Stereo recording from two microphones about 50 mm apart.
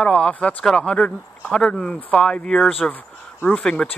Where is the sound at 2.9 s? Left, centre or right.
Left.